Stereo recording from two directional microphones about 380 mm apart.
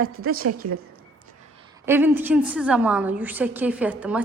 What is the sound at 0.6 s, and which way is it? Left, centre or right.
Speech, right.